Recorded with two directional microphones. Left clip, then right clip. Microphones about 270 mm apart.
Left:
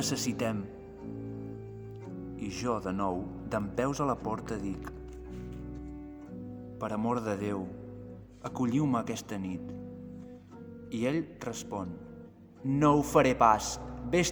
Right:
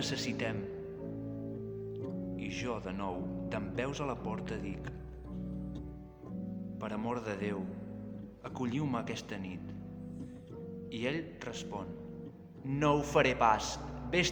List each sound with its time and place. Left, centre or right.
0.0 s speech: left
2.3 s speech: left
6.7 s speech: left
10.9 s speech: left